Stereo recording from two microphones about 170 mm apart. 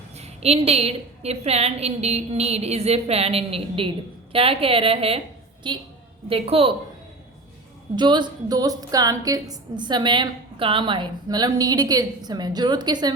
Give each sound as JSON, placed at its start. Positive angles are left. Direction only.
{"t": 0.2, "sound": "a woman's voice", "side_deg": -40}
{"t": 7.9, "sound": "a woman's voice", "side_deg": -25}